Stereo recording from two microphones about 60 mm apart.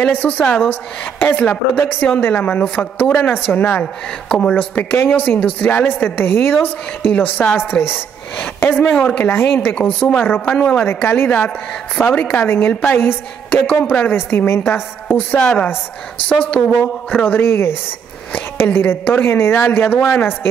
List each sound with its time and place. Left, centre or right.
0.0 s a woman's voice: left
3.8 s speech: centre
4.7 s a woman's voice: left
5.4 s a woman's voice: left
9.8 s a woman's voice: left
15.1 s a woman's voice: left
17.2 s a woman's voice: left